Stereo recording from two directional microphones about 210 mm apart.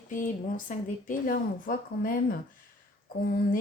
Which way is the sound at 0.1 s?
40° left (ahead or behind).